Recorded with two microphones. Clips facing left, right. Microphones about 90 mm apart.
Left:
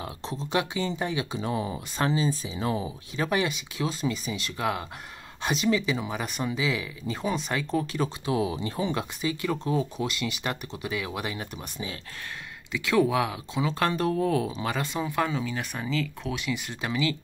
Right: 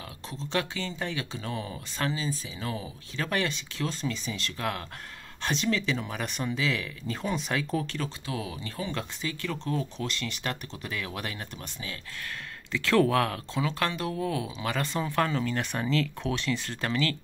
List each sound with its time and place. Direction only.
0.0 s a sound: 20° left (ahead or behind)
0.5 s speech: 15° left (ahead or behind)
8.0 s speech: 20° left (ahead or behind)
13.7 s speech: 25° left (ahead or behind)
14.7 s speech: 15° left (ahead or behind)